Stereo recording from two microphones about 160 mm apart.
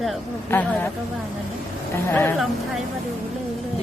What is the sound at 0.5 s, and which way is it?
Speech, 10° left (ahead or behind).